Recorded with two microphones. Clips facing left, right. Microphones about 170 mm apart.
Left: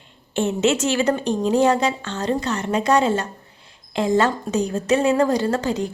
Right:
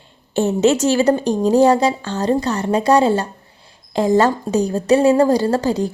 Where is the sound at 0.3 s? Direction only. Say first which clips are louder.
Right 4 dB; 35° right (ahead or behind).